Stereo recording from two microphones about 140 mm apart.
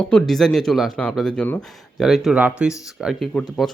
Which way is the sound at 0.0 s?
5° left (ahead or behind).